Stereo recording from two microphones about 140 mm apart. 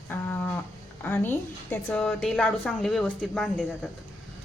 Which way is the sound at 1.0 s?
15° left (ahead or behind).